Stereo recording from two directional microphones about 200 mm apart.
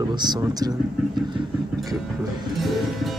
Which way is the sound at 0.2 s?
20° right (ahead or behind).